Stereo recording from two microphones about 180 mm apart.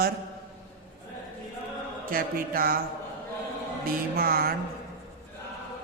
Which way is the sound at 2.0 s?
55° right (ahead or behind).